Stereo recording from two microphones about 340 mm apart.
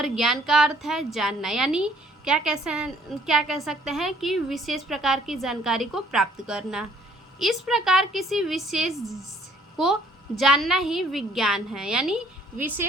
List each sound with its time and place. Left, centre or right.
0.0 s a woman's voice: centre